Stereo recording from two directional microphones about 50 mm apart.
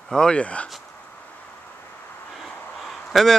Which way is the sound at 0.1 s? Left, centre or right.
Centre.